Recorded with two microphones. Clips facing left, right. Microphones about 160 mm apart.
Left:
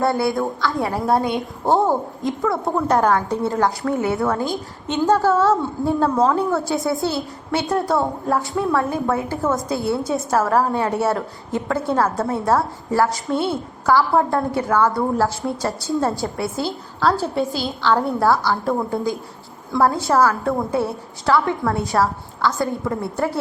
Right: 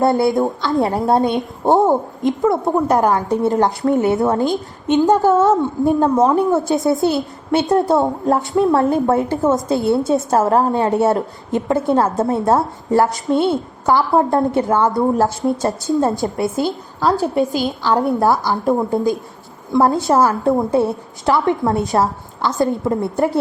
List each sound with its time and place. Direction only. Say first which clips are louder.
0.0 s a woman's voice: right 5 dB; 20° right (ahead or behind)